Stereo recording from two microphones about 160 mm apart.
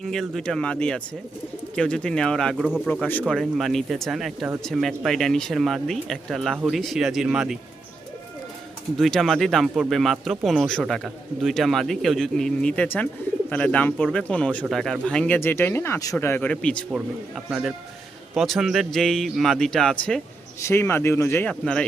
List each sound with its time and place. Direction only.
0.0 s speech: centre (ahead or behind)
2.8 s speech: 10° left (ahead or behind)
9.0 s speech: centre (ahead or behind)
20.6 s speech: 15° left (ahead or behind)
21.5 s speech: 5° left (ahead or behind)